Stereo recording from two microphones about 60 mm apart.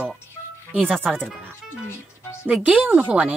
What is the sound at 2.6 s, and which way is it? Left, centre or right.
Speech, right.